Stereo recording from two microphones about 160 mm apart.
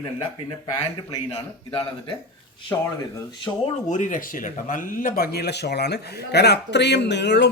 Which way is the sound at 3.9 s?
55° left (ahead or behind).